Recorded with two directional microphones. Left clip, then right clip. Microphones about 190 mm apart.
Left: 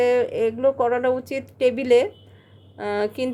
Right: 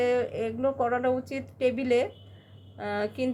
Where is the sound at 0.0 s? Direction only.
45° left (ahead or behind).